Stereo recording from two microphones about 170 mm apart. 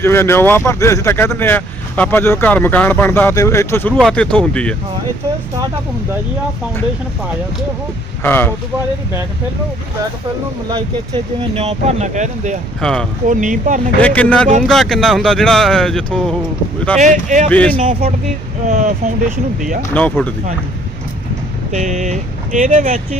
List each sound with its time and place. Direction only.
0.0 s speech: 15° left (ahead or behind)
8.2 s speech: 10° left (ahead or behind)
11.1 s speech: 35° right (ahead or behind)
12.8 s speech: 5° left (ahead or behind)
13.2 s speech: 50° right (ahead or behind)
14.0 s speech: 10° left (ahead or behind)
17.0 s speech: 50° right (ahead or behind)
17.5 s speech: 10° left (ahead or behind)
17.7 s speech: 50° right (ahead or behind)
19.9 s speech: 10° left (ahead or behind)
21.7 s speech: 45° right (ahead or behind)